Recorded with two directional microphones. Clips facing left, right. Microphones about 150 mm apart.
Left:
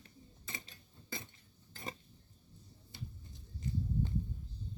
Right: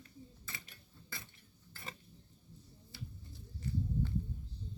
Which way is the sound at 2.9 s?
20° left (ahead or behind).